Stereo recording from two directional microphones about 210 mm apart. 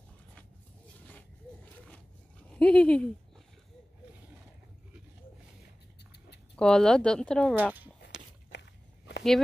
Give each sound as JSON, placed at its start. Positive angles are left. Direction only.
{"t": 1.0, "sound": "a sound", "side_deg": 5}
{"t": 2.5, "sound": "speech", "side_deg": 5}
{"t": 6.5, "sound": "speech", "side_deg": 5}
{"t": 7.5, "sound": "speech", "side_deg": -10}
{"t": 8.5, "sound": "walk", "side_deg": 55}